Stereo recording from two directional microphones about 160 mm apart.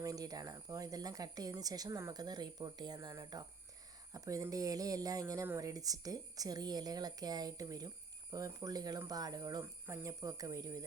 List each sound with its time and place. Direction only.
0.0 s speech: 20° right (ahead or behind)